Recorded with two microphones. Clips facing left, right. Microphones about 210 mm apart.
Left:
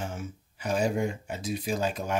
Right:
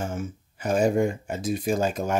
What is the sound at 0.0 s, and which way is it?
Speech, 45° right (ahead or behind).